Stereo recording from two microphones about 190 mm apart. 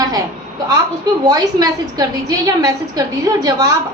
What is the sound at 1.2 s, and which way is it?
A woman's voice, 20° right (ahead or behind).